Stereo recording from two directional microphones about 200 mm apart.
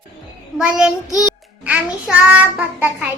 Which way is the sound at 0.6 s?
5° right (ahead or behind).